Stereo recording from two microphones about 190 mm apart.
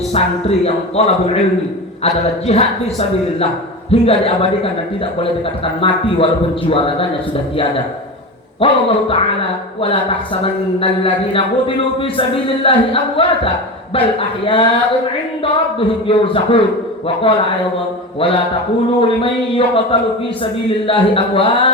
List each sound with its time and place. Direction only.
0.1 s a woman's voice: 35° left (ahead or behind)
5.8 s a woman's voice: 30° left (ahead or behind)
8.6 s a woman's voice: 30° left (ahead or behind)
16.0 s a woman's voice: 30° left (ahead or behind)
18.9 s a woman's voice: 30° left (ahead or behind)